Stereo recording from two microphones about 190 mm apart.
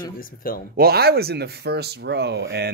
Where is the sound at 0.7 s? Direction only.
55° right (ahead or behind).